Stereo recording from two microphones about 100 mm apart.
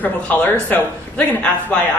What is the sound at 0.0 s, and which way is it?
Speech, 20° left (ahead or behind).